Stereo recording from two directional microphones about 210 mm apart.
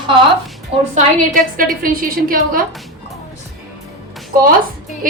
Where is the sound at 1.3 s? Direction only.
40° right (ahead or behind).